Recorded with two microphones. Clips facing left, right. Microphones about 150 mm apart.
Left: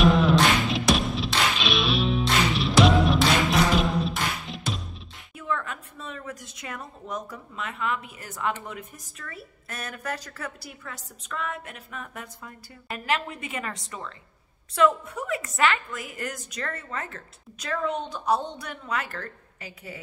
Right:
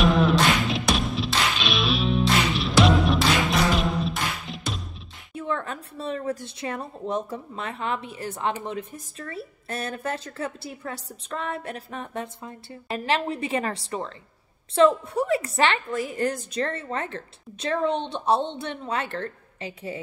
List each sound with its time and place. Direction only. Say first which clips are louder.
0.0 s music: even; centre (ahead or behind)
5.3 s a woman's voice: right 2 dB; 30° right (ahead or behind)